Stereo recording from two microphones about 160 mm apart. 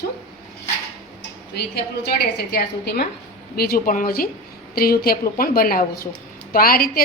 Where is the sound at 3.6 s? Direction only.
65° left (ahead or behind).